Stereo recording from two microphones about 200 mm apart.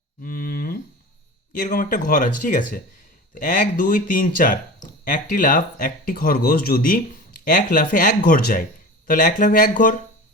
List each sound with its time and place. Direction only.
0.2 s cattle: 45° left (ahead or behind)
1.5 s speech: 40° left (ahead or behind)